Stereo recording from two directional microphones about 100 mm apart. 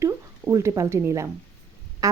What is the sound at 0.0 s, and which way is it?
A woman's voice, 30° right (ahead or behind).